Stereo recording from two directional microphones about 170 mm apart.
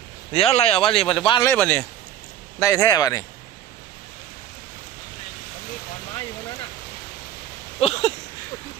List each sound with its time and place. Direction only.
0.3 s speech: 35° left (ahead or behind)
1.5 s speech: 10° left (ahead or behind)
2.6 s speech: 20° left (ahead or behind)
7.8 s a sound: 35° left (ahead or behind)